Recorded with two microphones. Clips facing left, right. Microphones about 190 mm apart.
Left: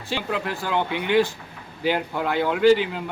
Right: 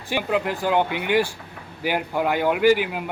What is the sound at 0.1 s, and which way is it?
A man's voice, 15° right (ahead or behind).